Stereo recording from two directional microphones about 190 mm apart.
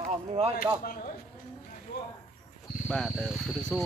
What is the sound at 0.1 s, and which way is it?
Speech, 35° right (ahead or behind).